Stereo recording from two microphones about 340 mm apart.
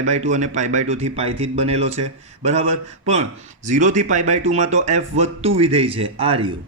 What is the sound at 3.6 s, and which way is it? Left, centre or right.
A man's voice, right.